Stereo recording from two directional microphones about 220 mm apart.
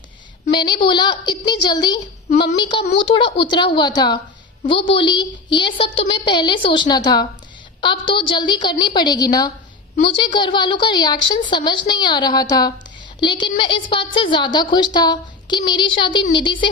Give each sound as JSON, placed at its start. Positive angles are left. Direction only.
{"t": 0.5, "sound": "a woman's voice", "side_deg": 20}